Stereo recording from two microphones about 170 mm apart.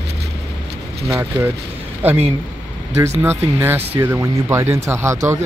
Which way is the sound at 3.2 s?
10° right (ahead or behind).